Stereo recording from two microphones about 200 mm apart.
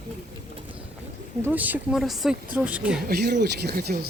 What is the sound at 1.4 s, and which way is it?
Speech, 10° right (ahead or behind).